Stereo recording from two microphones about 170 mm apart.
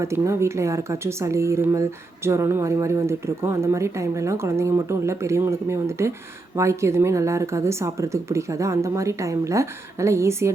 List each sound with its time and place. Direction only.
0.0 s speech: 15° right (ahead or behind)